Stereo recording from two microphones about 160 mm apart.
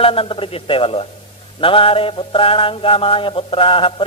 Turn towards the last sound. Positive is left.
turn(degrees=35)  # may be behind; listen again after turning